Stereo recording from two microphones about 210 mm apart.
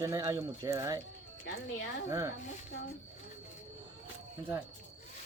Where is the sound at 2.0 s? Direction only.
15° right (ahead or behind).